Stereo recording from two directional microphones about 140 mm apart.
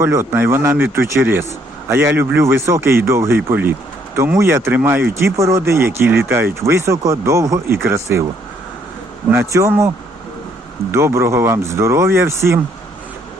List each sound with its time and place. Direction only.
0.0 s speech: 20° right (ahead or behind)
9.3 s speech: 20° right (ahead or behind)
10.9 s speech: 20° right (ahead or behind)